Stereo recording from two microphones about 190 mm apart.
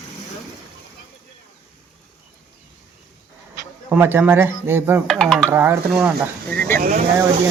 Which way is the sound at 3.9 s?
10° right (ahead or behind).